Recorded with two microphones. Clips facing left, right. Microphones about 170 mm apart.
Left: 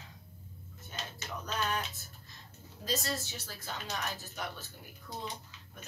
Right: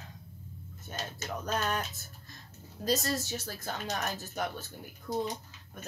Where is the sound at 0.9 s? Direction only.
45° right (ahead or behind).